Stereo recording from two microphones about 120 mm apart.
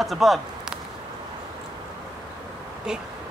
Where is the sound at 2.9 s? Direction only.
5° right (ahead or behind).